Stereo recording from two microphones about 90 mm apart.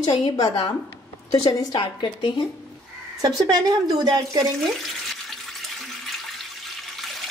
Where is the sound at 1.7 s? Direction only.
60° left (ahead or behind).